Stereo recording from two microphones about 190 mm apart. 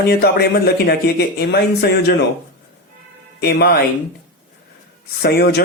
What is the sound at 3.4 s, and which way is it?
Speech, 55° left (ahead or behind).